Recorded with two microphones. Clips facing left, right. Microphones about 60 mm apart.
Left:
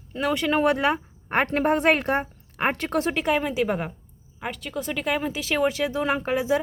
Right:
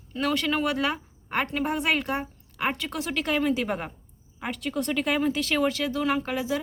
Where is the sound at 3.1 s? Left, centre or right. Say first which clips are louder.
Left 1 dB; centre.